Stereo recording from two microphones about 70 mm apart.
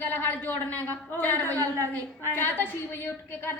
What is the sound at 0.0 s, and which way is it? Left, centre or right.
A woman's voice, left.